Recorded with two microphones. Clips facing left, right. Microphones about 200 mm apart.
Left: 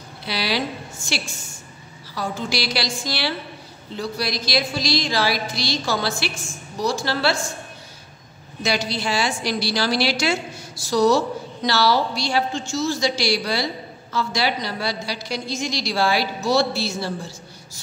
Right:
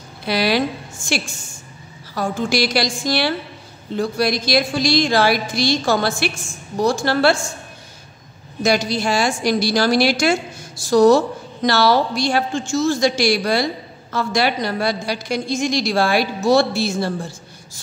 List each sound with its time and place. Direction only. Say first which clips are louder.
0.2 s a woman's voice: right 6 dB; 50° right (ahead or behind)
8.6 s a woman's voice: right 5 dB; 45° right (ahead or behind)